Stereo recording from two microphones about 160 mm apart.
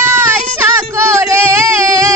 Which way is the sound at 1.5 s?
20° right (ahead or behind).